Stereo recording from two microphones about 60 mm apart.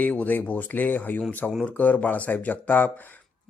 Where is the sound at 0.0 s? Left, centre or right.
Left.